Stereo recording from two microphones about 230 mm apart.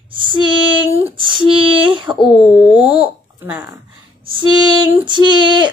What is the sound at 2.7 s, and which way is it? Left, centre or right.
Babbling, centre.